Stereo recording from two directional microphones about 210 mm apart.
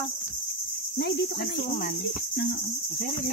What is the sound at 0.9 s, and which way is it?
Cricket, 55° left (ahead or behind).